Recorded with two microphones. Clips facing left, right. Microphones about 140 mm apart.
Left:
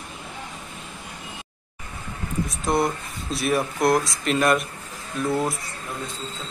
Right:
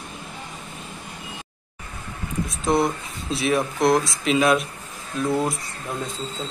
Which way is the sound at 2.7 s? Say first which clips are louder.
Right 2 dB; centre (ahead or behind).